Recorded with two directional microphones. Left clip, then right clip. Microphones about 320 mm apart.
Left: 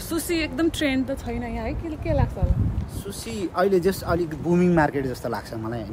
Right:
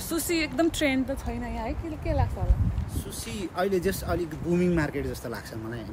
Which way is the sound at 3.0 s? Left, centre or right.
Centre.